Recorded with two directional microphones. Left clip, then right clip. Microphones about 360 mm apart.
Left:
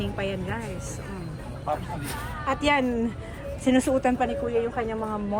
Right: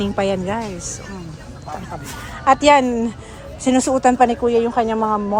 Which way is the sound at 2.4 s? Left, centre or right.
Centre.